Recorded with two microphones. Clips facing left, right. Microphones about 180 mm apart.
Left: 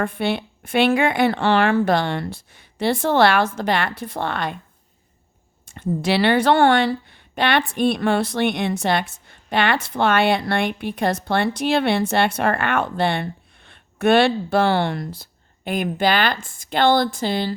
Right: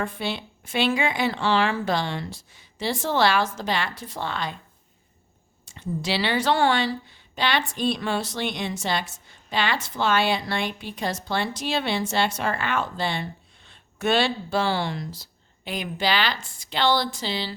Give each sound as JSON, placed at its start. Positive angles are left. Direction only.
{"t": 0.0, "sound": "speech", "side_deg": 60}
{"t": 5.6, "sound": "speech", "side_deg": 55}